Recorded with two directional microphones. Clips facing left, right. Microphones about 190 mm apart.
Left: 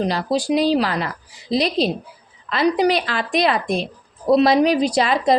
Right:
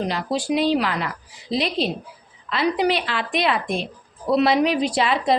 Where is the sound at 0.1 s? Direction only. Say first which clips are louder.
Left 3 dB; 35° left (ahead or behind).